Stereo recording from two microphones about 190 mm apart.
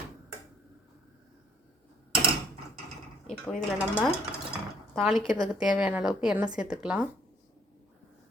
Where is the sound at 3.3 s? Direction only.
Centre (ahead or behind).